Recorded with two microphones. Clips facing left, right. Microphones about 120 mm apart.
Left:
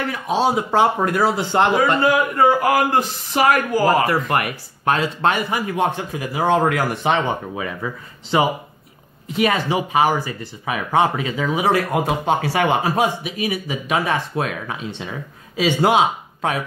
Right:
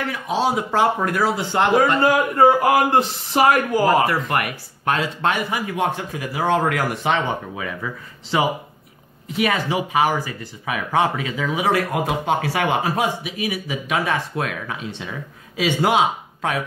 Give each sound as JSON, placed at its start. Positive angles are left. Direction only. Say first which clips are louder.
{"t": 0.1, "sound": "speech", "louder": "left 2 dB", "side_deg": 30}
{"t": 1.8, "sound": "a man's voice", "louder": "even", "side_deg": -40}
{"t": 4.1, "sound": "speech", "louder": "left 2 dB", "side_deg": 30}
{"t": 6.1, "sound": "speech", "louder": "left 3 dB", "side_deg": 25}